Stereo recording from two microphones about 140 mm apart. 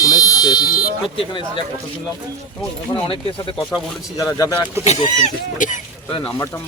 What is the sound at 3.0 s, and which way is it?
Speech, 40° left (ahead or behind).